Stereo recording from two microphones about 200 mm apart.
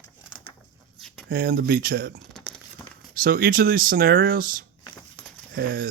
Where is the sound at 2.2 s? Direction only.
Centre (ahead or behind).